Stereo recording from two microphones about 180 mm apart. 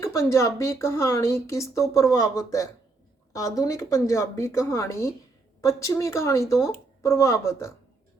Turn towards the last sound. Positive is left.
turn(degrees=15)  # may be behind; listen again after turning